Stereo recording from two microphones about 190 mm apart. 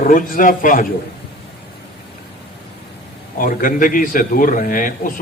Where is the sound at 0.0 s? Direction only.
45° left (ahead or behind).